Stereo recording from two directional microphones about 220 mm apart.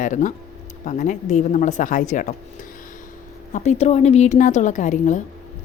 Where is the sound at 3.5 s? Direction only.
30° left (ahead or behind).